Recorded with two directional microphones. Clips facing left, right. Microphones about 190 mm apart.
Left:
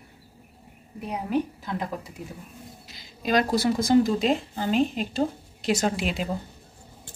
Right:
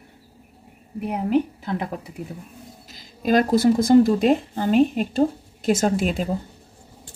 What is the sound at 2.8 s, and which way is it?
Speech, 45° right (ahead or behind).